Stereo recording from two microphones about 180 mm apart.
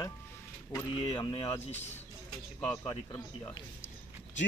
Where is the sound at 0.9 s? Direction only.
30° left (ahead or behind).